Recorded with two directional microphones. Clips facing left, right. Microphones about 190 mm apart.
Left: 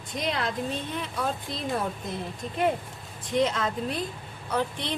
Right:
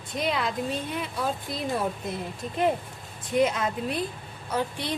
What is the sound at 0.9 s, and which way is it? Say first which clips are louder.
Speech: right 1 dB; 10° right (ahead or behind).